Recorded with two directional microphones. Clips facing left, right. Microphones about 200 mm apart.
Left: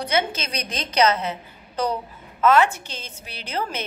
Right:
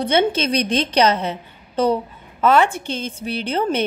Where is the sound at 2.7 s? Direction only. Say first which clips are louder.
Right 11 dB; 55° right (ahead or behind).